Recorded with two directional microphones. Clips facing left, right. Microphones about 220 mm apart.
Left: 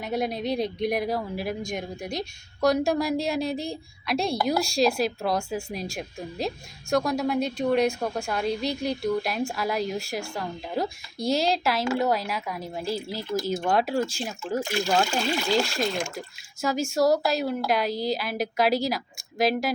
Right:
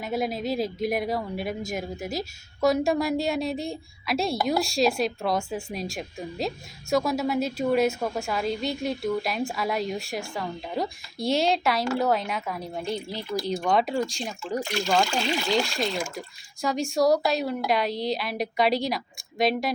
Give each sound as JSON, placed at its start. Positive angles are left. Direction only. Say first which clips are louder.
{"t": 0.0, "sound": "speech", "louder": "even", "side_deg": 0}